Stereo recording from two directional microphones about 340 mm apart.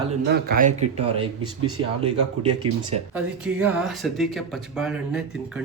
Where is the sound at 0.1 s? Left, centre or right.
Right.